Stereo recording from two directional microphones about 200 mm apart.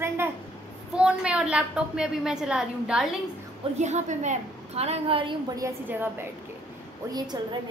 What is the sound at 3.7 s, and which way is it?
A woman's voice, 35° right (ahead or behind).